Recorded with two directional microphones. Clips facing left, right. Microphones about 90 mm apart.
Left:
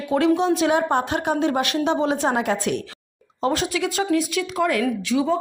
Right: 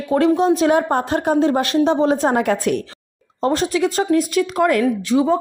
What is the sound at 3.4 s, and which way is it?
Speech, 35° right (ahead or behind).